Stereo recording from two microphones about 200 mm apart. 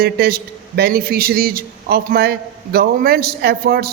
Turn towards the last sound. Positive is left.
turn(degrees=-50)  # may be behind; listen again after turning